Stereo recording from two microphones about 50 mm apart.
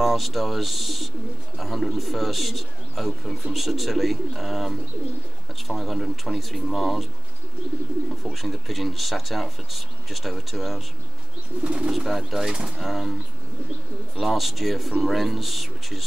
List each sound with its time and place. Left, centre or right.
0.0 s speech: centre
8.3 s speech: centre
11.6 s speech: right
11.9 s speech: centre
14.1 s speech: centre